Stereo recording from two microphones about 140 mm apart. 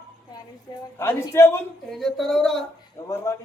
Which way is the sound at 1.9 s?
Centre (ahead or behind).